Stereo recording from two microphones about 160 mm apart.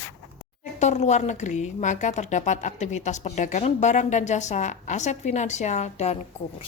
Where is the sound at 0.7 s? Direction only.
45° left (ahead or behind).